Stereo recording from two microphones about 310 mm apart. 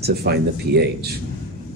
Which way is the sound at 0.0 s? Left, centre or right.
Right.